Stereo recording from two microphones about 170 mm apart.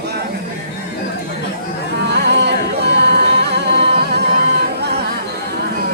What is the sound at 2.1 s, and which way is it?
Music, 80° right.